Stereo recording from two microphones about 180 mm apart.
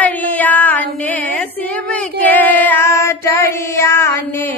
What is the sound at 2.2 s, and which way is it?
Female singing, 10° left (ahead or behind).